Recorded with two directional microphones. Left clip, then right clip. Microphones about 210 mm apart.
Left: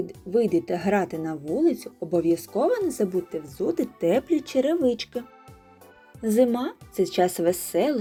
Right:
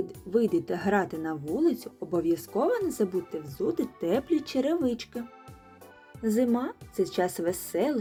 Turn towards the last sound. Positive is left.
turn(degrees=15)  # may be behind; listen again after turning